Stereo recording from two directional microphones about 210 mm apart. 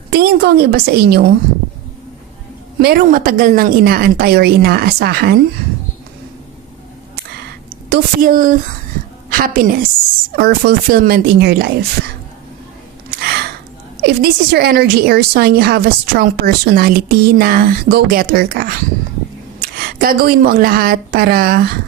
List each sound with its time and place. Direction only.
0.1 s a woman's voice: 50° right (ahead or behind)
2.8 s a woman's voice: 45° right (ahead or behind)
7.9 s a woman's voice: 45° right (ahead or behind)
13.1 s gasp: 50° right (ahead or behind)
14.0 s a woman's voice: 50° right (ahead or behind)